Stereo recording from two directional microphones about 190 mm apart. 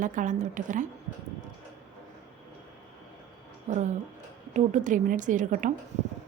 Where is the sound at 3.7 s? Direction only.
40° right (ahead or behind).